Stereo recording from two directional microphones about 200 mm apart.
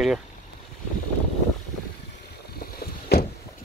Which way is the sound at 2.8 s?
50° left (ahead or behind).